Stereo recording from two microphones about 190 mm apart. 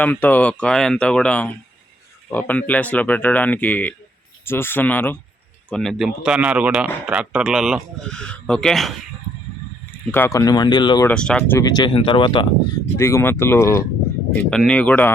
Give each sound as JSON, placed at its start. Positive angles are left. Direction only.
{"t": 0.0, "sound": "a man's voice", "side_deg": 10}
{"t": 10.1, "sound": "speech", "side_deg": 10}
{"t": 11.0, "sound": "speech", "side_deg": 5}
{"t": 13.0, "sound": "speech", "side_deg": 15}